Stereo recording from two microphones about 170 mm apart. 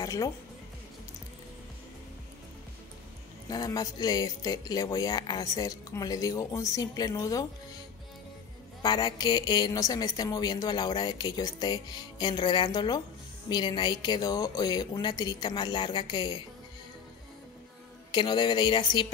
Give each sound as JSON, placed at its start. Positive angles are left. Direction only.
{"t": 0.0, "sound": "speech", "side_deg": 20}
{"t": 3.4, "sound": "a woman's voice", "side_deg": 20}
{"t": 8.8, "sound": "a woman's voice", "side_deg": 25}
{"t": 18.1, "sound": "a woman's voice", "side_deg": 25}